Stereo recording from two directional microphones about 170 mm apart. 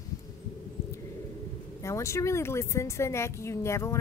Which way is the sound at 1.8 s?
15° left (ahead or behind).